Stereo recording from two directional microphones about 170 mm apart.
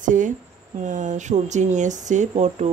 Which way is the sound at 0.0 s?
50° right (ahead or behind).